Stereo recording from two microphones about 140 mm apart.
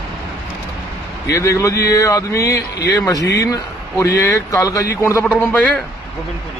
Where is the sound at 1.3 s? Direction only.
20° left (ahead or behind).